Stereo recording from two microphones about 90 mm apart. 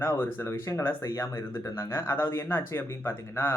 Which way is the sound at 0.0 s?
25° left (ahead or behind).